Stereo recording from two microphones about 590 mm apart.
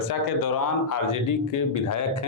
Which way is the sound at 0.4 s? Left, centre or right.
Left.